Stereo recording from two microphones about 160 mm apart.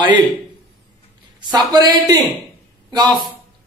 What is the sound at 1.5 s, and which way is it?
Speech, 25° right (ahead or behind).